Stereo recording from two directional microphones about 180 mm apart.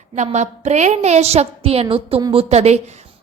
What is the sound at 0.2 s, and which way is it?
A woman's voice, 40° right (ahead or behind).